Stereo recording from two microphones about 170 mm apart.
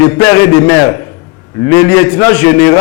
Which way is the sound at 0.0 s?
15° left (ahead or behind).